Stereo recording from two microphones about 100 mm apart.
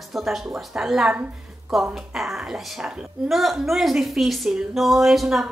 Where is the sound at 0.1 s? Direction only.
Centre (ahead or behind).